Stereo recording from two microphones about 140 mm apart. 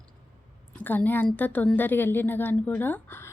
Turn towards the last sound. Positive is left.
turn(degrees=15)  # may be behind; listen again after turning